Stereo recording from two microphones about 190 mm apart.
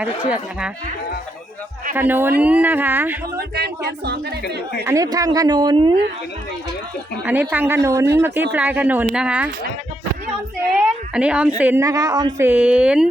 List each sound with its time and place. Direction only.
0.0 s a woman's voice: 5° right (ahead or behind)
2.0 s a woman's voice: 10° right (ahead or behind)
3.3 s speech: 60° right (ahead or behind)
4.9 s speech: 20° right (ahead or behind)
7.3 s a woman's voice: 10° right (ahead or behind)
10.8 s a woman's voice: 5° right (ahead or behind)